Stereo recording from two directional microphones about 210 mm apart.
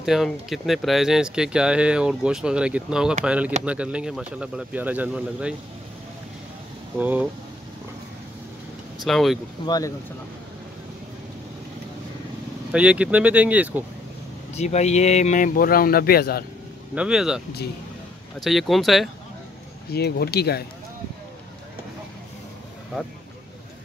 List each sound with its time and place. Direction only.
0.0 s speech: centre (ahead or behind)
7.0 s speech: 5° right (ahead or behind)
9.0 s speech: centre (ahead or behind)
9.7 s speech: 15° left (ahead or behind)
12.7 s speech: 5° right (ahead or behind)
14.5 s speech: 30° left (ahead or behind); by 16.4 s 45° left (ahead or behind)
16.9 s speech: 5° right (ahead or behind)
18.4 s speech: centre (ahead or behind)
19.9 s speech: 50° left (ahead or behind)